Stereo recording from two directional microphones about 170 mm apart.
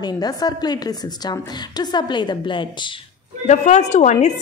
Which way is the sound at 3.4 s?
45° left (ahead or behind).